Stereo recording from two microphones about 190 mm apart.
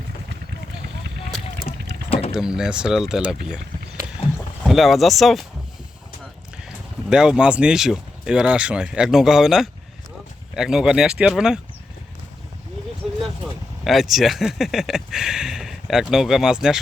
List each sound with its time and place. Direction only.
2.0 s vehicle: 30° left (ahead or behind)
2.3 s speech: 5° right (ahead or behind)
4.6 s speech: centre (ahead or behind)
7.1 s speech: 5° right (ahead or behind)
13.8 s speech: centre (ahead or behind)